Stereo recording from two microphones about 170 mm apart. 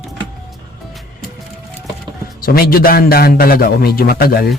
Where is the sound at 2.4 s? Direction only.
60° left (ahead or behind).